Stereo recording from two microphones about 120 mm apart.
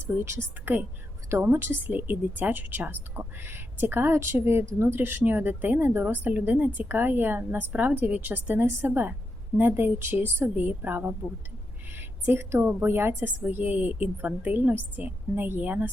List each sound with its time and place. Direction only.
0.0 s a woman's voice: 20° right (ahead or behind)